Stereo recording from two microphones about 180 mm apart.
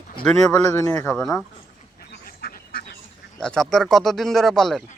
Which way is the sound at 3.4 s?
5° left (ahead or behind).